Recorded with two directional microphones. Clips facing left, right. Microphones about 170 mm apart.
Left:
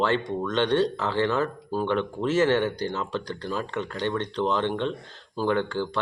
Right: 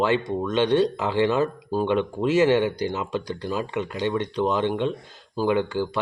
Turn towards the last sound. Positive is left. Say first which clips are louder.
# right 3 dB
turn(degrees=-10)  # may be behind; listen again after turning